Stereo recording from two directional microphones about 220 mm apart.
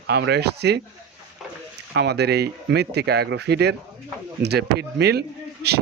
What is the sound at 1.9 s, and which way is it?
Speech, 50° right (ahead or behind).